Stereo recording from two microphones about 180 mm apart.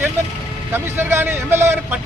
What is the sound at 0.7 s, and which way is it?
Speech, 10° right (ahead or behind).